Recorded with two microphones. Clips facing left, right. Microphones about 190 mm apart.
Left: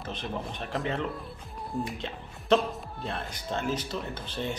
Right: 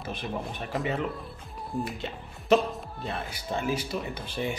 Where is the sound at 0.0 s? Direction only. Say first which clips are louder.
Right 1 dB; 10° right (ahead or behind).